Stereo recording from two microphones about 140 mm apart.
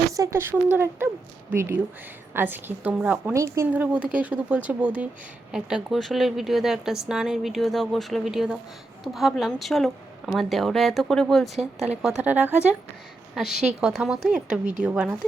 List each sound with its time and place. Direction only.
0.1 s speech: 20° right (ahead or behind)
3.3 s speech: 20° right (ahead or behind)
3.7 s a woman's voice: 10° right (ahead or behind)